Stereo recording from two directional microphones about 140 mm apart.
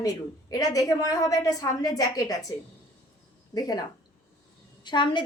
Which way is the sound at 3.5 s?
25° left (ahead or behind).